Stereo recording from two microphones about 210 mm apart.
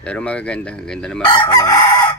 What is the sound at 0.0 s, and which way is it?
Speech, 5° left (ahead or behind).